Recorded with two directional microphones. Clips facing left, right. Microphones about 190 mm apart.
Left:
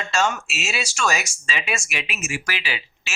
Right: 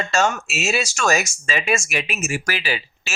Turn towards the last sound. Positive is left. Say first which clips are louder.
# right 5 dB
turn(degrees=-40)  # may be behind; listen again after turning